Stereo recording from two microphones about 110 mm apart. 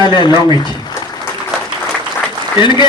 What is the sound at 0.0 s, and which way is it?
Speech, 45° left (ahead or behind).